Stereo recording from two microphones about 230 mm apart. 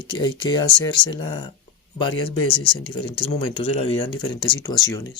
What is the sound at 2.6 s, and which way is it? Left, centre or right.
Speech, left.